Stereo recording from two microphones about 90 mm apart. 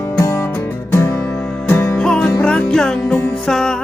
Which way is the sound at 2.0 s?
10° left (ahead or behind).